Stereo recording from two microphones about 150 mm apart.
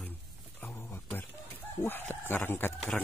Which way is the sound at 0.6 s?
15° left (ahead or behind).